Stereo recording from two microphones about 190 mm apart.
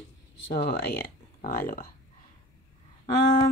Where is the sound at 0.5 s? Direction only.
55° left (ahead or behind).